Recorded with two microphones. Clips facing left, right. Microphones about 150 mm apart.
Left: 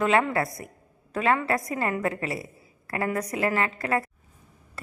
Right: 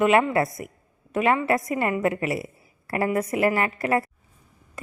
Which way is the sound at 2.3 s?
25° right (ahead or behind).